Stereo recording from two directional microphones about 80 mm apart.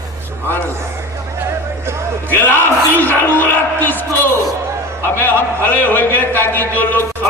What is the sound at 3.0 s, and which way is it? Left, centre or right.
Speech, left.